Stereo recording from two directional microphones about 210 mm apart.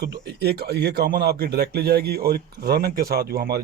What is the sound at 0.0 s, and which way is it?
A man's voice, 50° right (ahead or behind).